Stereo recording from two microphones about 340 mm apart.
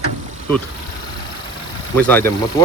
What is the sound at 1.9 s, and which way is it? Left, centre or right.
Speech, centre.